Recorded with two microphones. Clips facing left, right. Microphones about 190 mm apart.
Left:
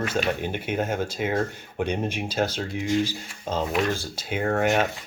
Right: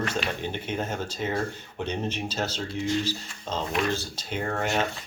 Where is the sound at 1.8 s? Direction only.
10° left (ahead or behind).